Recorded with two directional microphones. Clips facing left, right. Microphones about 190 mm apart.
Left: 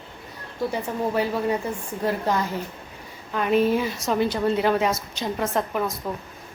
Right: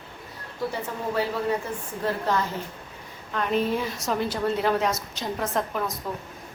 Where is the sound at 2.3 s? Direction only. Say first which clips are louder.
Left 2 dB; 15° left (ahead or behind).